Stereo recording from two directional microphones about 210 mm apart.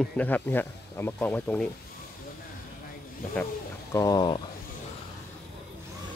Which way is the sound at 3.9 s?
15° left (ahead or behind).